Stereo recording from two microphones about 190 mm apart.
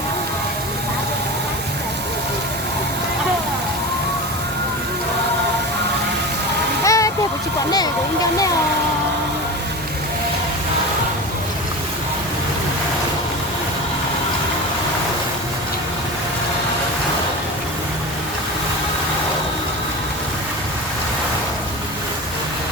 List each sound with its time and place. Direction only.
6.8 s splash: 15° left (ahead or behind)